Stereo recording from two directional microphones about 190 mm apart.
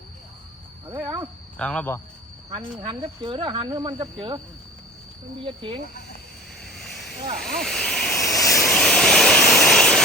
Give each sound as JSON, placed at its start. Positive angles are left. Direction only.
{"t": 1.0, "sound": "speech", "side_deg": -20}
{"t": 1.5, "sound": "speech", "side_deg": 5}
{"t": 2.8, "sound": "speech", "side_deg": -25}
{"t": 5.4, "sound": "speech", "side_deg": -25}
{"t": 6.6, "sound": "a sound", "side_deg": 0}
{"t": 7.3, "sound": "speech", "side_deg": 0}
{"t": 8.4, "sound": "vehicle", "side_deg": 0}